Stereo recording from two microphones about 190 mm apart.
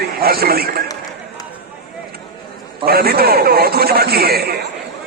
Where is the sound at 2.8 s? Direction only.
55° right (ahead or behind).